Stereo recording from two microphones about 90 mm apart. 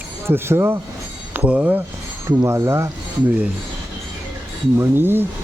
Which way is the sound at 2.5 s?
30° right (ahead or behind).